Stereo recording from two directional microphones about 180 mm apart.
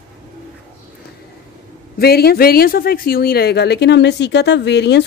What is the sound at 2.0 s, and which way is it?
A woman's voice, 60° left (ahead or behind).